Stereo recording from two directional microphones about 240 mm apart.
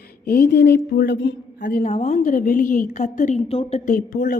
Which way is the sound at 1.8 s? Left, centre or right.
Left.